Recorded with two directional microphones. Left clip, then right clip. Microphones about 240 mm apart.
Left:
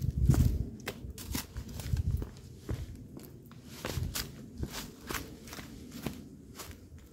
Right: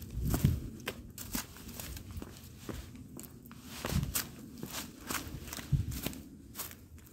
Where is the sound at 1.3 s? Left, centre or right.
Right.